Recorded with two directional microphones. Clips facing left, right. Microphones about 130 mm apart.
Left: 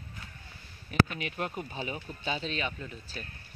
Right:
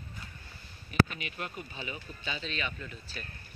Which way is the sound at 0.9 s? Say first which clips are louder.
Left 1 dB; 50° left (ahead or behind).